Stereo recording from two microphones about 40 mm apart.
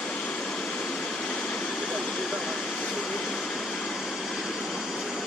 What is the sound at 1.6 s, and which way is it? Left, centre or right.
Vehicle, left.